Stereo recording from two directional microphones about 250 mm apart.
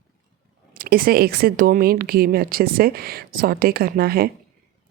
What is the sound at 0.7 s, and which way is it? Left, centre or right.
Speech, right.